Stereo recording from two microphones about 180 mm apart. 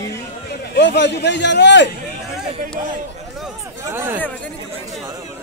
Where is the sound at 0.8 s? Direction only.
75° left (ahead or behind).